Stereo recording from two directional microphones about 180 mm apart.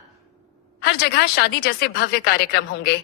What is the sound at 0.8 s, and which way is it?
A woman's voice, 65° left (ahead or behind).